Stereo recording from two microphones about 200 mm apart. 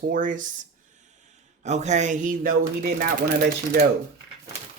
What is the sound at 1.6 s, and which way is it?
Speech, 35° right (ahead or behind).